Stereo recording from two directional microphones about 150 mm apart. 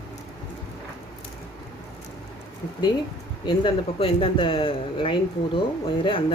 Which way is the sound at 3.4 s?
35° left (ahead or behind).